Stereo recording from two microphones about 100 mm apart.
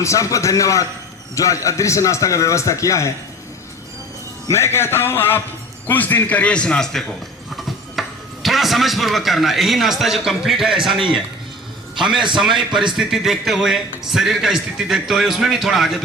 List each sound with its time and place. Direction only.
0.0 s a man's voice: 30° left (ahead or behind)
4.4 s a man's voice: 25° left (ahead or behind); by 16.0 s centre (ahead or behind)